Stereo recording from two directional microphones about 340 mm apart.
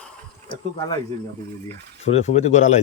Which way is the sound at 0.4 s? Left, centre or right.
Centre.